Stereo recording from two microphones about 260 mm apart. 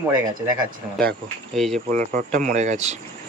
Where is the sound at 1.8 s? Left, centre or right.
Right.